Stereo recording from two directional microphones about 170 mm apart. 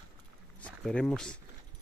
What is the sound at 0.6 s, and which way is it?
Speech, 5° left (ahead or behind).